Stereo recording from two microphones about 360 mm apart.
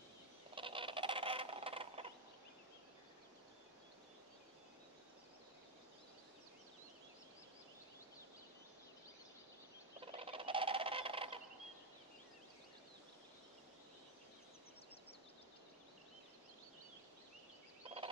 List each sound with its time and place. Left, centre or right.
0.6 s a sound: centre
9.9 s fowl: centre
17.8 s gobble: centre